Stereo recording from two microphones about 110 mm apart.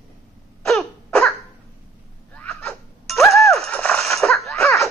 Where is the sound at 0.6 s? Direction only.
5° left (ahead or behind).